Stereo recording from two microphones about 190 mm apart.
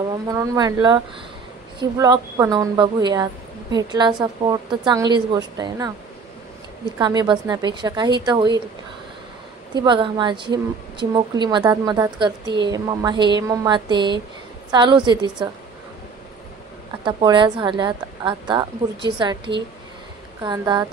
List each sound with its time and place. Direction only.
0.0 s a woman's voice: 20° right (ahead or behind)
7.0 s a woman's voice: 20° right (ahead or behind)
9.8 s a woman's voice: 25° right (ahead or behind)
17.0 s a woman's voice: 25° right (ahead or behind)